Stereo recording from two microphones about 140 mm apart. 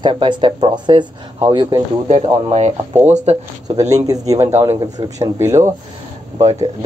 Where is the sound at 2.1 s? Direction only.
50° right (ahead or behind).